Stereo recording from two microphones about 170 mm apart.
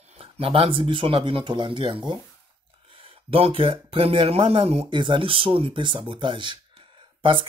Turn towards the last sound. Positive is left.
turn(degrees=-30)  # may be behind; listen again after turning